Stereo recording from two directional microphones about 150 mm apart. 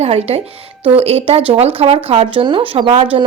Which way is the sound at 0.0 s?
45° right (ahead or behind).